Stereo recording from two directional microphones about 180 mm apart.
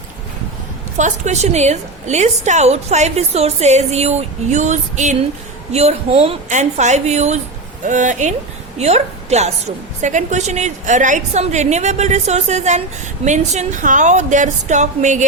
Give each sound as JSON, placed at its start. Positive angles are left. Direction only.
{"t": 0.9, "sound": "a woman's voice", "side_deg": -40}